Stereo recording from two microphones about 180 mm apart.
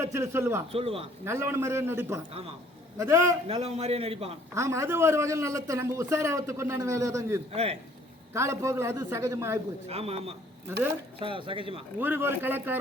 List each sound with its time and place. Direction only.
0.0 s a man's voice: 15° right (ahead or behind)
0.7 s a man's voice: 35° right (ahead or behind)
1.2 s a man's voice: 15° right (ahead or behind)
3.4 s a man's voice: 35° right (ahead or behind)
4.5 s a man's voice: 15° right (ahead or behind)
7.5 s a man's voice: 35° right (ahead or behind)
8.3 s a man's voice: 15° right (ahead or behind)
9.9 s a man's voice: 35° right (ahead or behind)
11.9 s a man's voice: 10° right (ahead or behind)